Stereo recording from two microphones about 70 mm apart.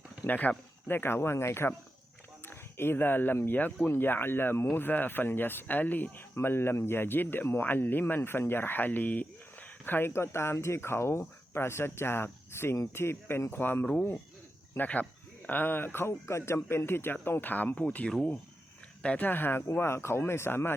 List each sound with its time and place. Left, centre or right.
0.3 s speech: left